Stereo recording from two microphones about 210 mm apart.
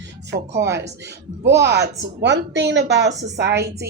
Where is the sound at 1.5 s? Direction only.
55° right (ahead or behind).